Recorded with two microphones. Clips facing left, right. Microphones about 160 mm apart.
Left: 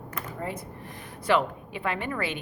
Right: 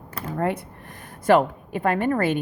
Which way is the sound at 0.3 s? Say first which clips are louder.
Right 11 dB; 65° right (ahead or behind).